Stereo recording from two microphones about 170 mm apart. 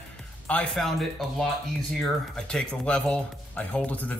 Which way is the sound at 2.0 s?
5° left (ahead or behind).